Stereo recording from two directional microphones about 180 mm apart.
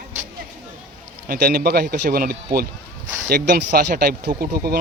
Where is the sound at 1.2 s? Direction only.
55° right (ahead or behind).